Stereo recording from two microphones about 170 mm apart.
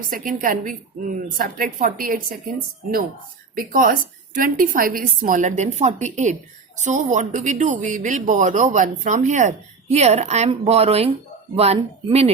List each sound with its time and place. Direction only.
0.1 s a woman's voice: 55° right (ahead or behind)
3.5 s speech: 55° right (ahead or behind); by 12.3 s 35° right (ahead or behind)